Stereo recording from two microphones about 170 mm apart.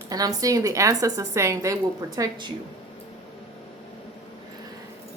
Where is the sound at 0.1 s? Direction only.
20° right (ahead or behind).